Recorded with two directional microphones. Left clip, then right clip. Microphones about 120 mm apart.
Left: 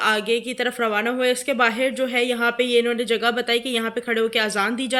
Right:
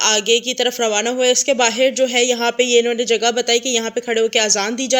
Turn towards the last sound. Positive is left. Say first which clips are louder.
# right 5 dB
turn(degrees=-30)  # may be behind; listen again after turning